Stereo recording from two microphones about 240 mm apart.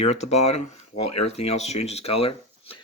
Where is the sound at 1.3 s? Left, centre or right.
Left.